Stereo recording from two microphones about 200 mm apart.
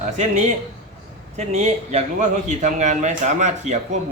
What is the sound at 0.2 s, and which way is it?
Speech, 35° right (ahead or behind).